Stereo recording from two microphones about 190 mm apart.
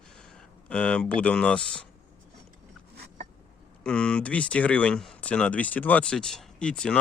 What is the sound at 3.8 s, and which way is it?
Speech, 5° left (ahead or behind).